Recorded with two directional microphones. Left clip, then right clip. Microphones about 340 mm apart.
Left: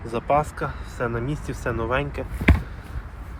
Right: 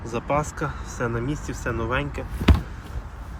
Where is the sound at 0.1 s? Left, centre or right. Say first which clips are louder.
Left 3 dB; centre.